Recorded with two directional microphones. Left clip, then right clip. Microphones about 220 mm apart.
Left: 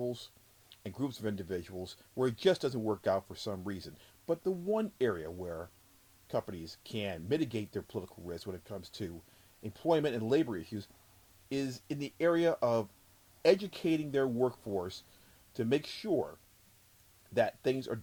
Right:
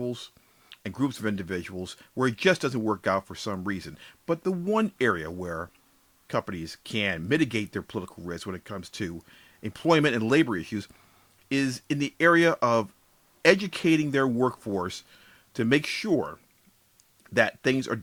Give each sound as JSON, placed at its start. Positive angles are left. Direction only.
{"t": 0.0, "sound": "speech", "side_deg": -15}
{"t": 14.3, "sound": "speech", "side_deg": -50}
{"t": 14.8, "sound": "speech", "side_deg": -25}
{"t": 17.3, "sound": "speech", "side_deg": -25}